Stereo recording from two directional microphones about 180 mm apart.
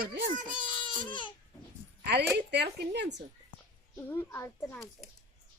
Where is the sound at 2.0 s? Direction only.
70° right (ahead or behind).